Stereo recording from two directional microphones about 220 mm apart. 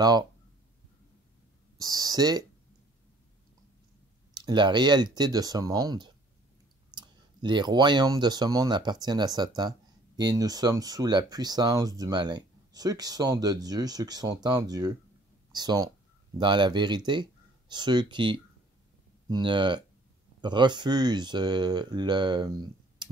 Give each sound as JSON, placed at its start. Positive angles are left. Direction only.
{"t": 1.8, "sound": "speech", "side_deg": -15}
{"t": 4.3, "sound": "speech", "side_deg": -20}